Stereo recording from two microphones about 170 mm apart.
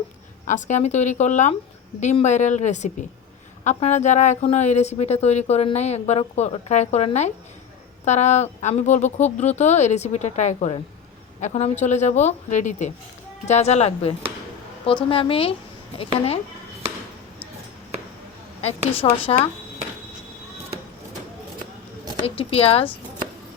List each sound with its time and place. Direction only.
0.4 s a woman's voice: 45° left (ahead or behind)
18.6 s a woman's voice: 35° left (ahead or behind)
22.2 s a woman's voice: 35° left (ahead or behind)